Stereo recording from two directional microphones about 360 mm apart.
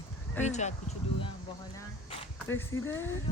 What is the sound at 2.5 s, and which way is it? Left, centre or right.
Speech, centre.